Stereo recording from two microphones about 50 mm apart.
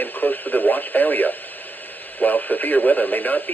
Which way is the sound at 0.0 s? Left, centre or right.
Left.